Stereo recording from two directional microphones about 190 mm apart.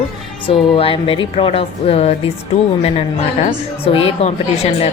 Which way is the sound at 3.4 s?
30° left (ahead or behind).